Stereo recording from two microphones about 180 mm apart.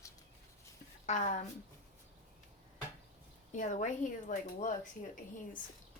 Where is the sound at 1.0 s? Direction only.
40° left (ahead or behind).